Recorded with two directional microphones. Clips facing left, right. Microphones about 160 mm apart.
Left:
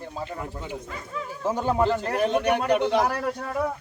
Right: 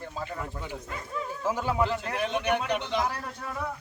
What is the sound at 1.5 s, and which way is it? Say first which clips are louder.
A man's voice: left 5 dB; 35° left (ahead or behind).